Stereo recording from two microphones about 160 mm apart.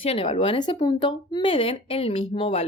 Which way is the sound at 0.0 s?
35° left (ahead or behind).